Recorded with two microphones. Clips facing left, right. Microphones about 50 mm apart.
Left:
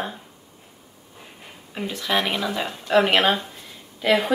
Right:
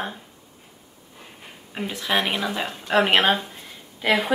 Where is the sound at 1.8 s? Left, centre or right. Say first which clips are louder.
Even; centre.